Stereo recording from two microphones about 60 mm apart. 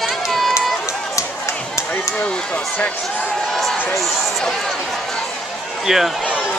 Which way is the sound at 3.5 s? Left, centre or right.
Centre.